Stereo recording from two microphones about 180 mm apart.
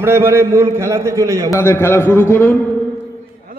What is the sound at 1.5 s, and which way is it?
A man's voice, 15° left (ahead or behind).